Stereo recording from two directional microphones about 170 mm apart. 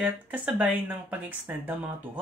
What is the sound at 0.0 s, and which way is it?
Speech, 10° right (ahead or behind).